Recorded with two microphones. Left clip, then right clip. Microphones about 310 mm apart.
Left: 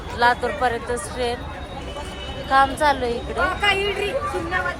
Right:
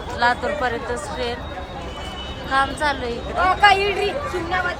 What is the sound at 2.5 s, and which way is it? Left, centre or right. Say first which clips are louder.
Speech: left 3 dB; centre.